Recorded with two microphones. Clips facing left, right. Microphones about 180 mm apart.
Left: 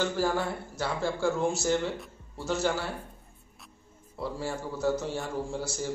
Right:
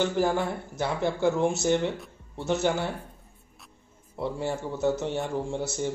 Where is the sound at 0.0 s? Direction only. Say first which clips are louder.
Right 3 dB; 20° right (ahead or behind).